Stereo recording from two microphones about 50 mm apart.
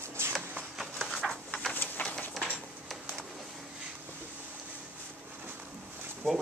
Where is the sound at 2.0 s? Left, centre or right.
Left.